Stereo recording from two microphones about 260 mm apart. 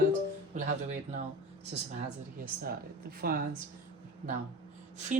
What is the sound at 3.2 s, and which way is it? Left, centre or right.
Speech, right.